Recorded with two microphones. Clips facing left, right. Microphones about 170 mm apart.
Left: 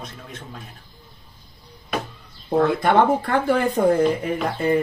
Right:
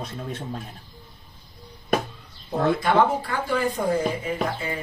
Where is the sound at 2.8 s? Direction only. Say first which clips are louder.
Left 3 dB; 55° left (ahead or behind).